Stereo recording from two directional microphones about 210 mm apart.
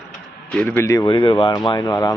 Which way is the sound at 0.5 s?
10° left (ahead or behind).